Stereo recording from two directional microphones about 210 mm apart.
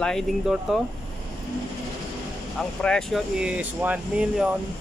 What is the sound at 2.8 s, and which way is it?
Speech, 5° left (ahead or behind).